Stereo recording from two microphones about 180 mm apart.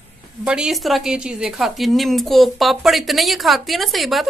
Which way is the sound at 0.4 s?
5° right (ahead or behind).